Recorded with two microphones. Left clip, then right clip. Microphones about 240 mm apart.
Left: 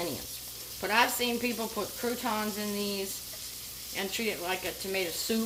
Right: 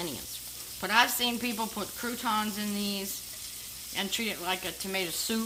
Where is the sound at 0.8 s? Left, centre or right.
Right.